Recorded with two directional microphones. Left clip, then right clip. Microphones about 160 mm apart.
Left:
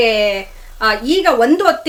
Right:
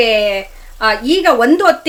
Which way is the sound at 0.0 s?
10° right (ahead or behind).